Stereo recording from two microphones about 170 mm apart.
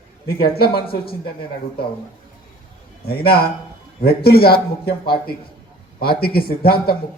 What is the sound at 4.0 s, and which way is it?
A man's voice, 65° left (ahead or behind).